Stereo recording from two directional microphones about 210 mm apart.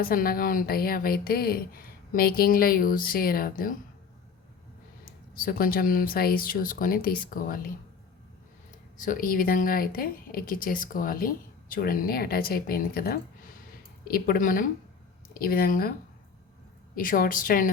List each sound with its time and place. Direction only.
0.0 s speech: 45° left (ahead or behind)
5.3 s speech: 45° left (ahead or behind)
9.0 s a woman's voice: 40° left (ahead or behind)
16.9 s a woman's voice: 40° left (ahead or behind)